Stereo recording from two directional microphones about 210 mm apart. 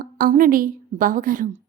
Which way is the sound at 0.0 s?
40° right (ahead or behind).